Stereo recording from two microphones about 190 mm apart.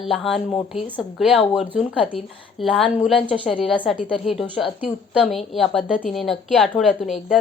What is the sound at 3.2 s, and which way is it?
Speech, 30° left (ahead or behind).